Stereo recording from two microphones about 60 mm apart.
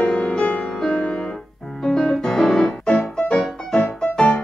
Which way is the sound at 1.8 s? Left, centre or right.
Centre.